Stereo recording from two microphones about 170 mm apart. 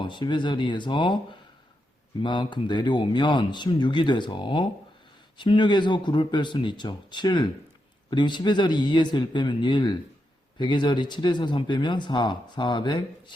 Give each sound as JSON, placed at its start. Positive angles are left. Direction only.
{"t": 0.0, "sound": "speech", "side_deg": 25}